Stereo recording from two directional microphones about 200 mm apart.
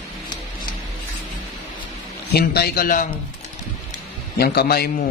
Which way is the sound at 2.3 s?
55° left (ahead or behind).